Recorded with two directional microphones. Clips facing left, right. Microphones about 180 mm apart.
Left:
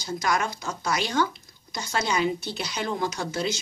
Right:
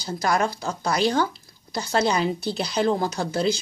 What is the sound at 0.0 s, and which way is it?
Speech, 35° right (ahead or behind).